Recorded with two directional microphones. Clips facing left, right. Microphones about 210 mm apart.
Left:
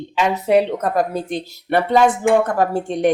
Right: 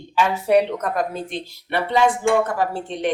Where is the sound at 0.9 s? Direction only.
45° left (ahead or behind).